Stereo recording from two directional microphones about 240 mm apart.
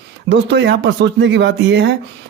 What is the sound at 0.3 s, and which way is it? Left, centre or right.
Speech, right.